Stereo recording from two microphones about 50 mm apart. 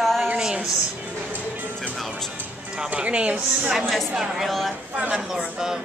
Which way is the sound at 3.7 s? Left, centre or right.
Centre.